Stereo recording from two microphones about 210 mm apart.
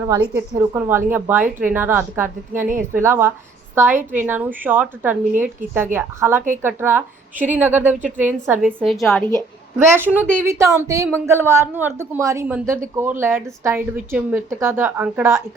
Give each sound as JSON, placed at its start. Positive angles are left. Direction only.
{"t": 0.0, "sound": "a woman's voice", "side_deg": -10}
{"t": 2.6, "sound": "a woman's voice", "side_deg": -40}
{"t": 3.0, "sound": "a woman's voice", "side_deg": -10}
{"t": 7.9, "sound": "a woman's voice", "side_deg": -35}
{"t": 8.2, "sound": "a woman's voice", "side_deg": -10}
{"t": 9.3, "sound": "a woman's voice", "side_deg": -10}